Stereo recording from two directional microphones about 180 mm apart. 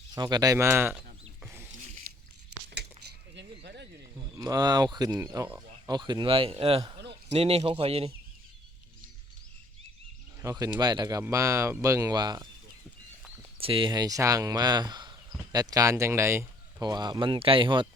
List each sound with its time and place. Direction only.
0.1 s speech: 20° right (ahead or behind)
3.3 s a sound: 75° right (ahead or behind)
4.4 s speech: 20° right (ahead or behind)
5.9 s speech: 25° right (ahead or behind)
10.4 s speech: 15° right (ahead or behind)
13.6 s speech: 30° right (ahead or behind)